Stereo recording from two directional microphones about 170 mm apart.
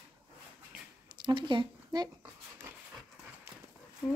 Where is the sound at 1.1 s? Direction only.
25° right (ahead or behind).